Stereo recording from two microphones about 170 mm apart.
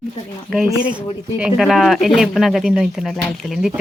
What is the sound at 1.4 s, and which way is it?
Speech, 5° right (ahead or behind).